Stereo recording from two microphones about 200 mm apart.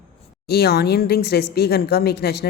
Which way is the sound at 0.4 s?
50° left (ahead or behind).